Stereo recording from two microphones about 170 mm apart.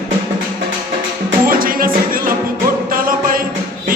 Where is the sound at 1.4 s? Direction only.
55° right (ahead or behind).